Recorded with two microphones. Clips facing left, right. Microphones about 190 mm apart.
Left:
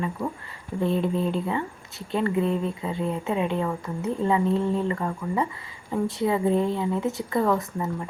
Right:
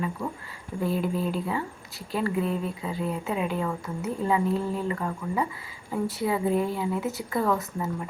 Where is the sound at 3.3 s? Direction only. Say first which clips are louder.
Left 4 dB; 30° left (ahead or behind).